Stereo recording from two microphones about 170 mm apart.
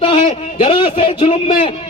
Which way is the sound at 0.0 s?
30° left (ahead or behind).